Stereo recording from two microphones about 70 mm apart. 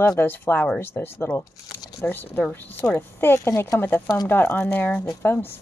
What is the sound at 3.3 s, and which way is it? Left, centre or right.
Speech, left.